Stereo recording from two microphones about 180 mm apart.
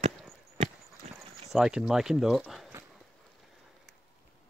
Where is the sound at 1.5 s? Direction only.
Centre (ahead or behind).